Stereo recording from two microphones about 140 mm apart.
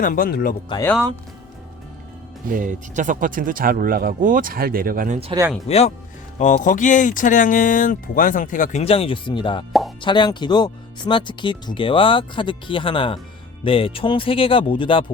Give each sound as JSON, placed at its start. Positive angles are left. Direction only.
{"t": 0.0, "sound": "speech", "side_deg": 80}
{"t": 2.5, "sound": "speech", "side_deg": -70}
{"t": 5.6, "sound": "speech", "side_deg": 50}
{"t": 6.4, "sound": "speech", "side_deg": 65}
{"t": 8.8, "sound": "speech", "side_deg": 45}